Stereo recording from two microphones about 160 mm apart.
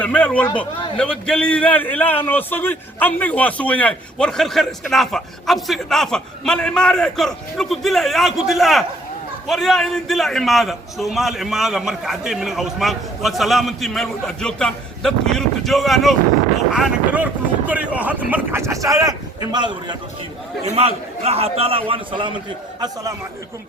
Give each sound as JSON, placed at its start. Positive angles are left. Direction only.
{"t": 0.0, "sound": "a man's voice", "side_deg": 10}
{"t": 20.7, "sound": "a man's voice", "side_deg": -40}